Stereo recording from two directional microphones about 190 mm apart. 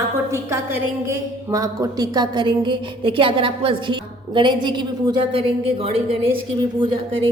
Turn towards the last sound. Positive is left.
turn(degrees=-25)  # may be behind; listen again after turning